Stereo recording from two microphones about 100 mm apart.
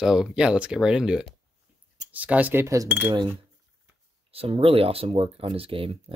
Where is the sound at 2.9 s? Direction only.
20° right (ahead or behind).